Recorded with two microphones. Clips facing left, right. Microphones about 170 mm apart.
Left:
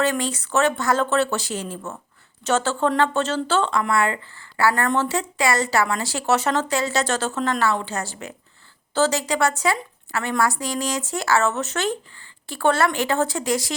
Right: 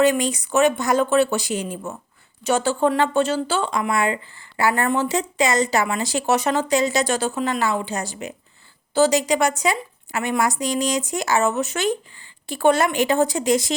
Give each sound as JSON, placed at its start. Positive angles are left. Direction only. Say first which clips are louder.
{"t": 0.0, "sound": "speech", "louder": "right 5 dB", "side_deg": -15}